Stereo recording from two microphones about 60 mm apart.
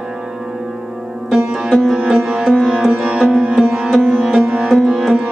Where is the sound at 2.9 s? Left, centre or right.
Centre.